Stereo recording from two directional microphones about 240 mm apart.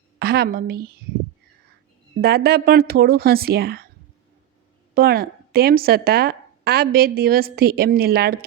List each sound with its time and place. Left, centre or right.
0.2 s a woman's voice: right
2.2 s speech: right
4.9 s speech: right